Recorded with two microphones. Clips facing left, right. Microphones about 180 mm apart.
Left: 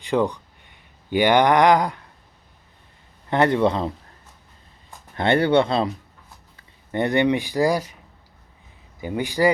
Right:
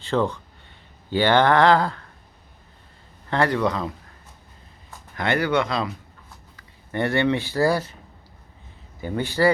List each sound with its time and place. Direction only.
0.0 s speech: 15° left (ahead or behind)
1.1 s a sound: 15° left (ahead or behind)
3.2 s speech: 20° left (ahead or behind)
5.1 s speech: 30° left (ahead or behind)
6.6 s speech: 20° left (ahead or behind)
9.0 s a sound: 15° left (ahead or behind)